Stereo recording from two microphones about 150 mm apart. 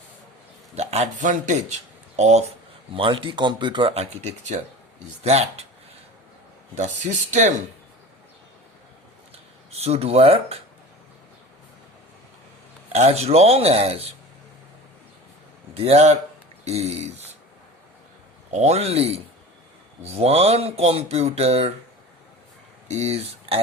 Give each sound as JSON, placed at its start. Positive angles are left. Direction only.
{"t": 0.8, "sound": "speech", "side_deg": -45}
{"t": 2.9, "sound": "speech", "side_deg": -35}
{"t": 6.7, "sound": "speech", "side_deg": -50}
{"t": 9.7, "sound": "speech", "side_deg": -45}
{"t": 12.9, "sound": "speech", "side_deg": -45}
{"t": 15.7, "sound": "speech", "side_deg": -45}
{"t": 18.5, "sound": "speech", "side_deg": -45}
{"t": 22.9, "sound": "speech", "side_deg": -45}